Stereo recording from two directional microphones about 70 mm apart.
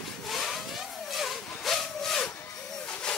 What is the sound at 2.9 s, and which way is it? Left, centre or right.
Hiss, centre.